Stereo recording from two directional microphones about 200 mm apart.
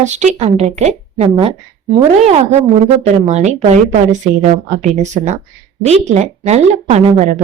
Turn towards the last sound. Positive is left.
turn(degrees=-35)  # may be behind; listen again after turning